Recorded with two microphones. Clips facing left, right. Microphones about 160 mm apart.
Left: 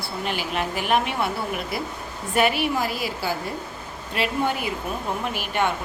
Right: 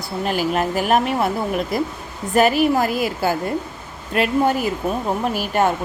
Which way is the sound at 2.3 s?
40° right (ahead or behind).